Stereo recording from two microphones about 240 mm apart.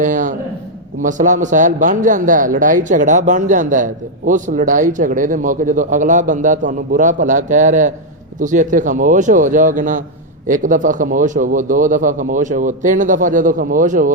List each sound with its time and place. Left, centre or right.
0.0 s a man's voice: right